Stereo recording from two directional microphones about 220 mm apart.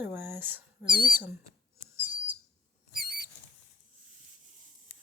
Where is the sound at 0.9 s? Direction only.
40° left (ahead or behind).